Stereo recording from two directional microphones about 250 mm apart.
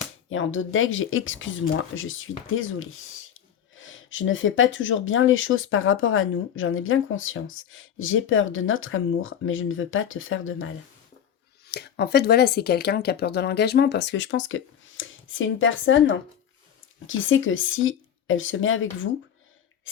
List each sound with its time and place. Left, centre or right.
0.3 s speech: left
11.7 s speech: left